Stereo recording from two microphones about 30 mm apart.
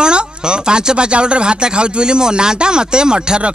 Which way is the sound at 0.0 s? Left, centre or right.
Right.